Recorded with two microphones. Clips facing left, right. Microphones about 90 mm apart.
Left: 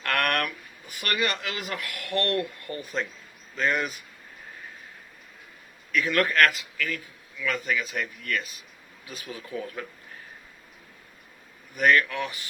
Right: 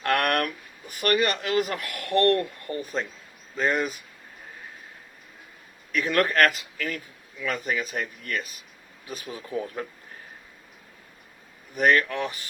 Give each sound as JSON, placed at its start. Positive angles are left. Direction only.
{"t": 0.0, "sound": "a man's voice", "side_deg": -35}
{"t": 5.9, "sound": "a man's voice", "side_deg": -35}
{"t": 11.8, "sound": "a man's voice", "side_deg": -35}